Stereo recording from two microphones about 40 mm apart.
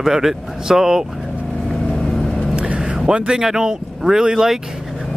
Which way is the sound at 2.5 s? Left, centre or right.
Right.